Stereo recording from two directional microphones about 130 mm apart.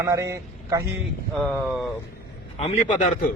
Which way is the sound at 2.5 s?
55° left (ahead or behind).